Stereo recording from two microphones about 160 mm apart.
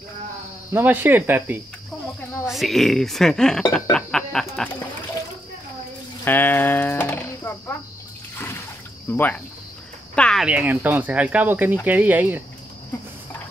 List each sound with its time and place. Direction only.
0.7 s speech: 10° right (ahead or behind)
2.4 s speech: centre (ahead or behind)
3.9 s a sound: 5° left (ahead or behind)
6.2 s music: 10° left (ahead or behind)
9.1 s speech: 10° left (ahead or behind)
10.1 s cricket: 5° left (ahead or behind)
10.4 s speech: 10° right (ahead or behind)